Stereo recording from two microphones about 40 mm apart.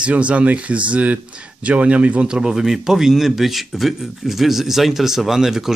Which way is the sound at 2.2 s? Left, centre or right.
Centre.